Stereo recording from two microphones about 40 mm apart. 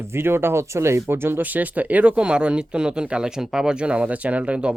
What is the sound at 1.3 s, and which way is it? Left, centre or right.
Speech, right.